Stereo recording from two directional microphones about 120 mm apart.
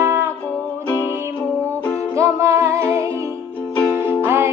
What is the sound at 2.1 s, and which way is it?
Music, 25° right (ahead or behind).